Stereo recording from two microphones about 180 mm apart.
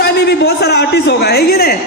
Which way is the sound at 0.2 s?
65° left (ahead or behind).